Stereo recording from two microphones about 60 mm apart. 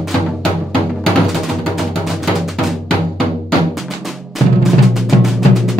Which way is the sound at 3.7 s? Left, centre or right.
Centre.